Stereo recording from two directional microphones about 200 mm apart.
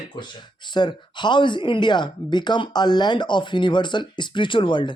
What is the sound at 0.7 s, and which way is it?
Speech, 20° left (ahead or behind).